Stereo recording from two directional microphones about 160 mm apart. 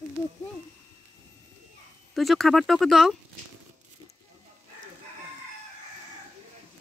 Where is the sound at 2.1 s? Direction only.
Centre (ahead or behind).